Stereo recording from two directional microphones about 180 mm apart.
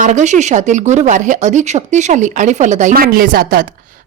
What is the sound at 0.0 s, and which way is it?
A woman's voice, 40° right (ahead or behind).